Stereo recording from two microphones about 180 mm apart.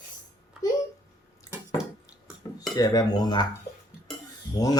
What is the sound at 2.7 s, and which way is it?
Mantra, 20° left (ahead or behind).